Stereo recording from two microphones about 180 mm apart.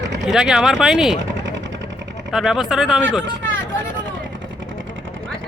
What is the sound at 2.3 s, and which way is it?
Speech, centre (ahead or behind).